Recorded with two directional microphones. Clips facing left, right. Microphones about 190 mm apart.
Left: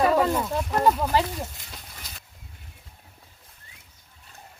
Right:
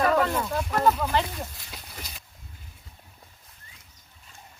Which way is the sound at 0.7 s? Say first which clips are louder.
Left 2 dB; 10° left (ahead or behind).